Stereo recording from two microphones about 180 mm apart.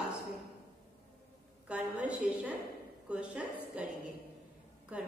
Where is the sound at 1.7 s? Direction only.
5° right (ahead or behind).